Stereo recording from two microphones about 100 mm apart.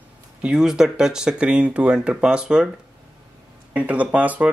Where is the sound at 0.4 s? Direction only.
10° right (ahead or behind).